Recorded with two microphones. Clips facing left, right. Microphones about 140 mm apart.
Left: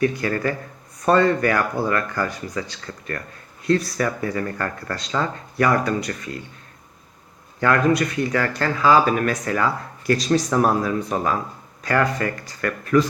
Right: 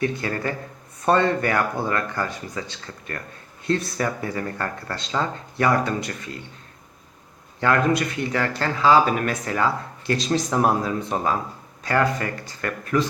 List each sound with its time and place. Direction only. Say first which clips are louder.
0.0 s speech: left 4 dB; 25° right (ahead or behind)
7.6 s speech: left 2 dB; 25° right (ahead or behind)